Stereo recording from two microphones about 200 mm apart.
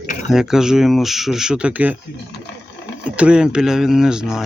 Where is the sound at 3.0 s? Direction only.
5° right (ahead or behind).